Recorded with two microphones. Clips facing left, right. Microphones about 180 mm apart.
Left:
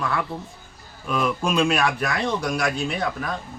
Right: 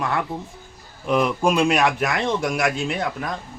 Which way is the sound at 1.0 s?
20° right (ahead or behind).